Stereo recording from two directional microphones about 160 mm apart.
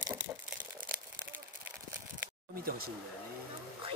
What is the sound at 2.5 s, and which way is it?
Speech, 65° right (ahead or behind).